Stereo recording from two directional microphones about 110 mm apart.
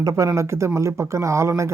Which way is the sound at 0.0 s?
35° right (ahead or behind).